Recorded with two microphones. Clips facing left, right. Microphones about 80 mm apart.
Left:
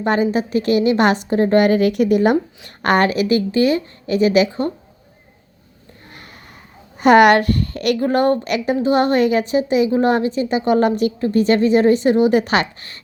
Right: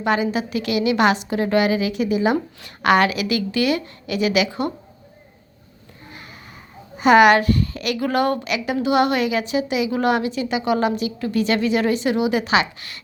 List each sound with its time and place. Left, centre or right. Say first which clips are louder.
0.0 s a woman's voice: left 3 dB; left
2.6 s a woman's voice: even; left
6.1 s a sound: right 1 dB; left
7.0 s speech: left 2 dB; left
8.0 s a woman's voice: left 2 dB; left